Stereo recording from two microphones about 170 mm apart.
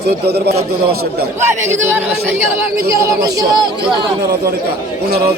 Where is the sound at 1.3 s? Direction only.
15° right (ahead or behind).